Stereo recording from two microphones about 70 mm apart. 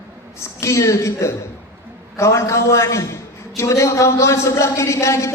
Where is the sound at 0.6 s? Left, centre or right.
Left.